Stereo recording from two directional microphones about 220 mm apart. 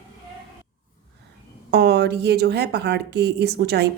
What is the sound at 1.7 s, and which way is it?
A woman's voice, 50° right (ahead or behind).